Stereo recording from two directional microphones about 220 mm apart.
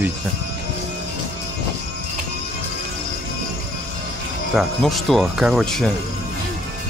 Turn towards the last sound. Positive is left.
turn(degrees=0)  # may be behind; listen again after turning